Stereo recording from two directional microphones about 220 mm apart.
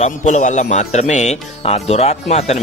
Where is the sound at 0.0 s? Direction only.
35° left (ahead or behind).